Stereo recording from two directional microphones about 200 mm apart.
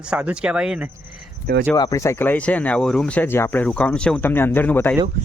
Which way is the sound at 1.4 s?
50° right (ahead or behind).